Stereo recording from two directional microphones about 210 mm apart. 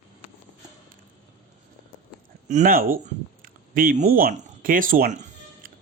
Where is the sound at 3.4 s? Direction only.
40° right (ahead or behind).